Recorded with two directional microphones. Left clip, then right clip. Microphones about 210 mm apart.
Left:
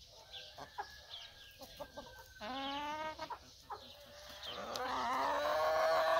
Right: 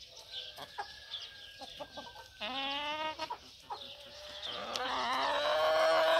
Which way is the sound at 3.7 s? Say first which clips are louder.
Right 5 dB; 55° right (ahead or behind).